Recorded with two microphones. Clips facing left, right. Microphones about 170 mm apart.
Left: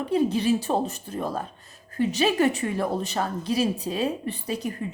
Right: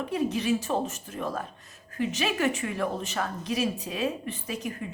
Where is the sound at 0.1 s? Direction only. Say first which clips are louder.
Left 5 dB; 30° left (ahead or behind).